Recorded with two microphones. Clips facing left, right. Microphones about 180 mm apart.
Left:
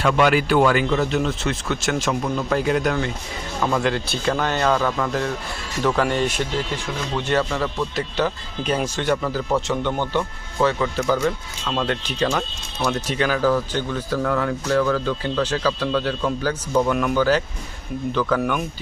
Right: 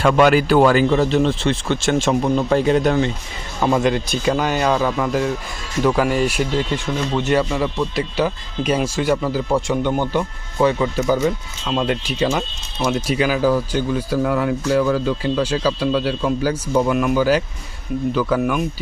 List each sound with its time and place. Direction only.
0.0 s speech: 45° right (ahead or behind); by 18.6 s 5° right (ahead or behind)